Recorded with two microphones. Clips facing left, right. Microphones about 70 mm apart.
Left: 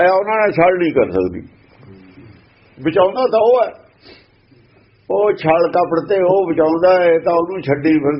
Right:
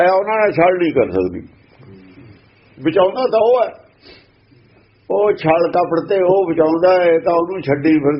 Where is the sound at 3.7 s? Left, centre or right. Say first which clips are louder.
Left 1 dB; left.